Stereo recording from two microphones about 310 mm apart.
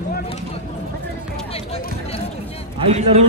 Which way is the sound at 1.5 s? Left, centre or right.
Centre.